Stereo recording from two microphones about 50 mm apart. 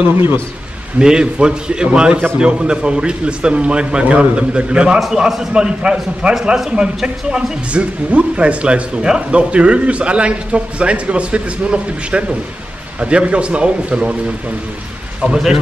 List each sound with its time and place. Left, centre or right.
0.0 s a man's voice: right
0.9 s a man's voice: centre
7.7 s a man's voice: right
15.2 s a man's voice: centre